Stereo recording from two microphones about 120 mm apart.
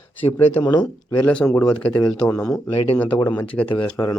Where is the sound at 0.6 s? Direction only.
35° left (ahead or behind).